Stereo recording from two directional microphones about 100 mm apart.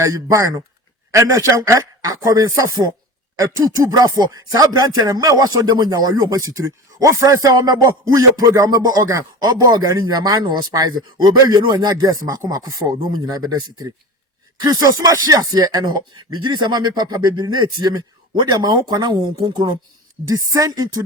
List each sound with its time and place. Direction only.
0.0 s a man's voice: 30° right (ahead or behind)